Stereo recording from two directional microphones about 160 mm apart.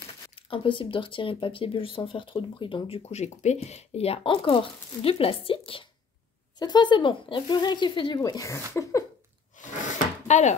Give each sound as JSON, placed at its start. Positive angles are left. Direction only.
{"t": 0.4, "sound": "speech", "side_deg": 30}
{"t": 9.6, "sound": "drawer open or close", "side_deg": 55}
{"t": 10.2, "sound": "speech", "side_deg": 50}